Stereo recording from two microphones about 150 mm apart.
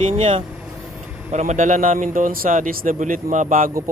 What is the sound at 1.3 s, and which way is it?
A man's voice, 50° right (ahead or behind).